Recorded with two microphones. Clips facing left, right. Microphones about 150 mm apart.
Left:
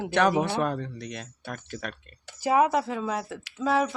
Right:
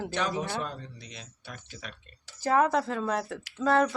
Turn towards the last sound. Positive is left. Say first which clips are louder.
# right 1 dB
turn(degrees=5)  # may be behind; listen again after turning